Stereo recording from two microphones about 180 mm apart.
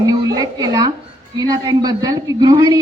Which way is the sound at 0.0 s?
20° right (ahead or behind).